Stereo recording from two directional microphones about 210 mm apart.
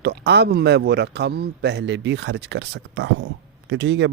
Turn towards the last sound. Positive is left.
turn(degrees=-60)  # may be behind; listen again after turning